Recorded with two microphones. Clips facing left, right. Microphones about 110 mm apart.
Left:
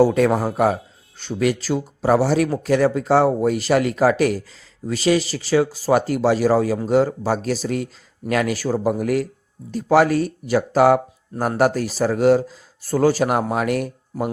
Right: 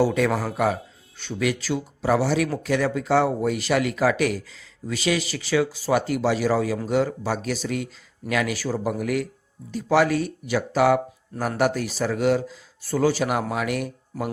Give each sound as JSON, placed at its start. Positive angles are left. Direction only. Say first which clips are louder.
{"t": 0.0, "sound": "a man's voice", "louder": "left 5 dB", "side_deg": 40}
{"t": 0.3, "sound": "a man's voice", "louder": "left 5 dB", "side_deg": 25}
{"t": 0.5, "sound": "speech", "louder": "left 4 dB", "side_deg": 40}